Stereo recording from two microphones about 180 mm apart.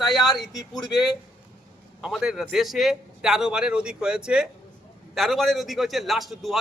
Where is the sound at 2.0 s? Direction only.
5° right (ahead or behind).